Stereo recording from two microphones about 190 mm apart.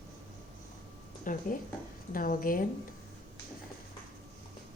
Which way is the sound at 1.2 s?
45° left (ahead or behind).